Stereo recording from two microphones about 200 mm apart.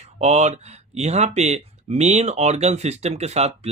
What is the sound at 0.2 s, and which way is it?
Speech, 35° right (ahead or behind).